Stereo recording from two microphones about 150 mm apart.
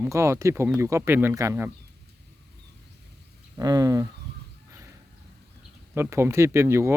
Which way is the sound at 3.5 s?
25° right (ahead or behind).